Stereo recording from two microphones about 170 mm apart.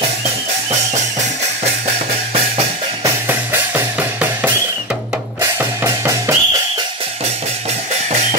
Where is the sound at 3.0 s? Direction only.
15° right (ahead or behind).